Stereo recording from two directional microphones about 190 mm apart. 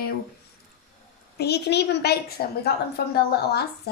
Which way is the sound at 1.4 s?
60° left (ahead or behind).